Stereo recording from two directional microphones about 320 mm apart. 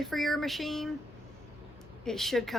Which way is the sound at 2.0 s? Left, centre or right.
Centre.